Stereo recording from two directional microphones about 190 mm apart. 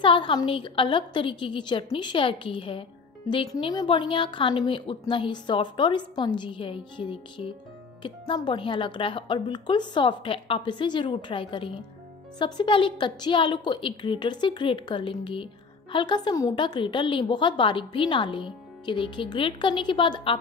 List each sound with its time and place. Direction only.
0.0 s a woman's voice: 25° left (ahead or behind)